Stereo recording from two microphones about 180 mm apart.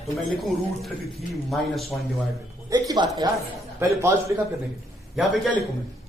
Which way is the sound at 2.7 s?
20° right (ahead or behind).